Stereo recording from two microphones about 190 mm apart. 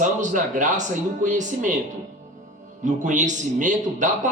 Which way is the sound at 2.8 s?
40° right (ahead or behind).